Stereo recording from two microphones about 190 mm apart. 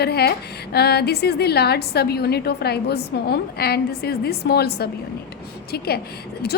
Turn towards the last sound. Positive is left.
turn(degrees=55)  # may be behind; listen again after turning